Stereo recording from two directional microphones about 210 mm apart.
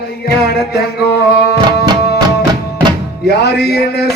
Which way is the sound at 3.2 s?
50° left (ahead or behind).